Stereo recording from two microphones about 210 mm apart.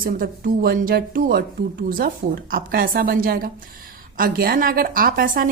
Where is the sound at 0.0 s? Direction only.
40° right (ahead or behind).